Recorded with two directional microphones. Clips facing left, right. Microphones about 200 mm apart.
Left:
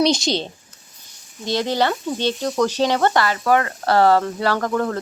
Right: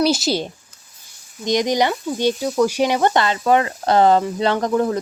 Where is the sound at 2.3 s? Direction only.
Centre (ahead or behind).